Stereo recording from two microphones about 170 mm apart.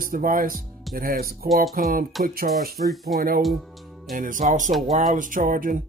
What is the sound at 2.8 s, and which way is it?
Speech, centre (ahead or behind).